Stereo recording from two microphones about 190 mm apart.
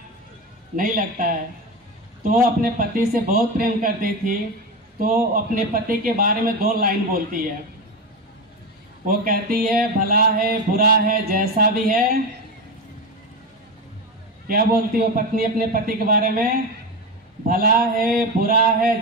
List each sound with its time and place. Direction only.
0.7 s speech: 45° right (ahead or behind)
9.0 s speech: 50° right (ahead or behind)
14.5 s speech: 50° right (ahead or behind)
17.5 s speech: 50° right (ahead or behind)